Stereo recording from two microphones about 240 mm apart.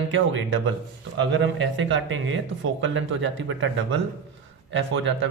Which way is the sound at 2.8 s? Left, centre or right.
Right.